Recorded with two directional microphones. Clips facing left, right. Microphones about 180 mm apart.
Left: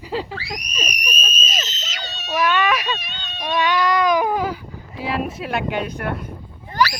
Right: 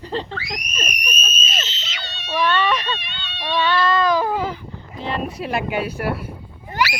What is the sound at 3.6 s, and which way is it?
Baby cry, 15° left (ahead or behind).